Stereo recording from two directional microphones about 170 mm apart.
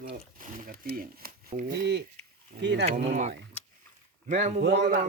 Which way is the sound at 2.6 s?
85° right.